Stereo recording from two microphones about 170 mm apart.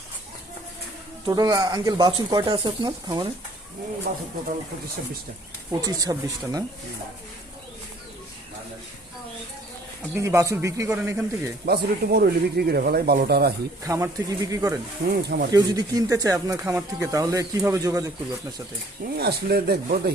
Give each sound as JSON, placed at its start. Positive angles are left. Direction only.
{"t": 1.3, "sound": "speech", "side_deg": -20}
{"t": 4.1, "sound": "speech", "side_deg": -55}
{"t": 5.8, "sound": "speech", "side_deg": -20}
{"t": 10.2, "sound": "speech", "side_deg": -15}
{"t": 11.6, "sound": "speech", "side_deg": -65}
{"t": 13.8, "sound": "speech", "side_deg": -20}
{"t": 15.1, "sound": "speech", "side_deg": -70}
{"t": 15.5, "sound": "speech", "side_deg": -20}
{"t": 19.1, "sound": "speech", "side_deg": -70}